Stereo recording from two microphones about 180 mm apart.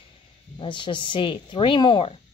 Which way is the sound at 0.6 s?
25° left (ahead or behind).